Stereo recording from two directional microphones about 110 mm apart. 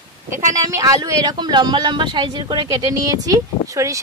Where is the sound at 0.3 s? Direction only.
30° right (ahead or behind).